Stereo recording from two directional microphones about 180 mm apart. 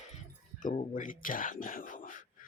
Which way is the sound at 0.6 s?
45° left (ahead or behind).